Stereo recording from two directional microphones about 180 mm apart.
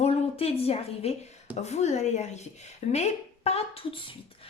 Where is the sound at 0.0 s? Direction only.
35° left (ahead or behind).